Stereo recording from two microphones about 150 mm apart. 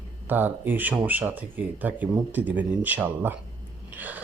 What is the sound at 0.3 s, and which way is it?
Speech, 10° right (ahead or behind).